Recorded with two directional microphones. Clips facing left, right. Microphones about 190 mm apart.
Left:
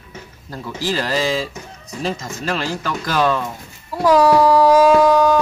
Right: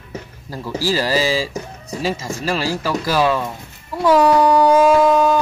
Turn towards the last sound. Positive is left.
turn(degrees=0)  # may be behind; listen again after turning